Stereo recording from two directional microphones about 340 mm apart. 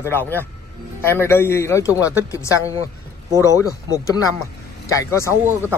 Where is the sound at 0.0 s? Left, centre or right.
Centre.